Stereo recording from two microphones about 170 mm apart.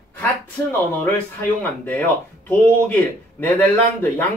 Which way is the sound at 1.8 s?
10° left (ahead or behind).